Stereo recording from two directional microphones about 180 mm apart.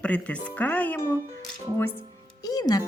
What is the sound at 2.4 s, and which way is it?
Music, 20° left (ahead or behind).